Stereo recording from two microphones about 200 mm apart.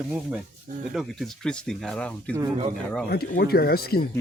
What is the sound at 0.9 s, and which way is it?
Speech, 5° left (ahead or behind).